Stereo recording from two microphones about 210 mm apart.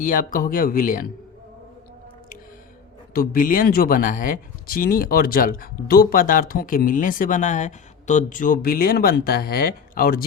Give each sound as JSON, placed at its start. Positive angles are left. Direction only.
{"t": 0.0, "sound": "speech", "side_deg": 40}
{"t": 3.1, "sound": "speech", "side_deg": 40}